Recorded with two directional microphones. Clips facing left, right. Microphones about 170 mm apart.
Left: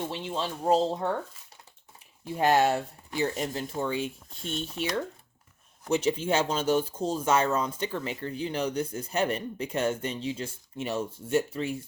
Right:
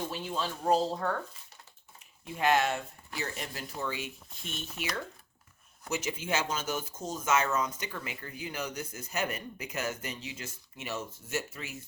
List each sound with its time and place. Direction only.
0.1 s speech: 25° left (ahead or behind)
2.2 s speech: 35° left (ahead or behind)
5.9 s speech: 30° left (ahead or behind)